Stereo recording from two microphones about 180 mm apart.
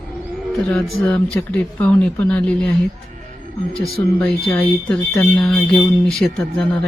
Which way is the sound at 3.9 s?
Centre (ahead or behind).